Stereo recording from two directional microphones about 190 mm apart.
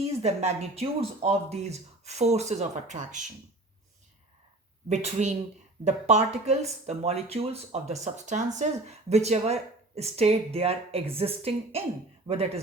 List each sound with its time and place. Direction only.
0.0 s speech: 35° right (ahead or behind)
4.9 s speech: 35° right (ahead or behind)